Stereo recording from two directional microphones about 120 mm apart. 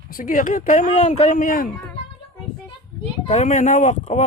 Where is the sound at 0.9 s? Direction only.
60° left (ahead or behind); by 1.5 s 85° left.